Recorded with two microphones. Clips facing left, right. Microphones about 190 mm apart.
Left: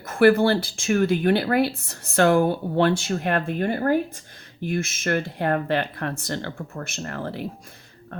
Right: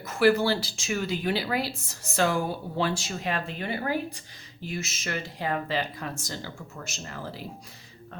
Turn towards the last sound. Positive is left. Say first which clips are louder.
# left 8 dB
turn(degrees=60)  # may be behind; listen again after turning